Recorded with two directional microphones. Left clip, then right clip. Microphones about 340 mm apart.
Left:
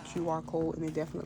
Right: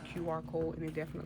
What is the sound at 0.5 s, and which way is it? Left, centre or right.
Speech, left.